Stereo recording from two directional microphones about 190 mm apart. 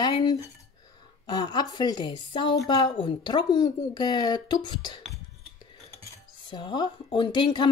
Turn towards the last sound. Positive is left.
turn(degrees=20)  # may be behind; listen again after turning